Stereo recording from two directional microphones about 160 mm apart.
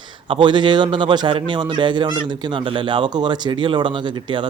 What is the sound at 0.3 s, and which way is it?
Speech, 30° right (ahead or behind).